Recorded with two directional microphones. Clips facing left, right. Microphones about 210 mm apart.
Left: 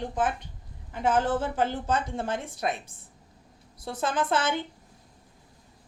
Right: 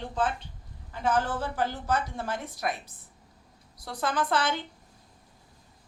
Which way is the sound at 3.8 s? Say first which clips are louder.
Left 1 dB; 25° left (ahead or behind).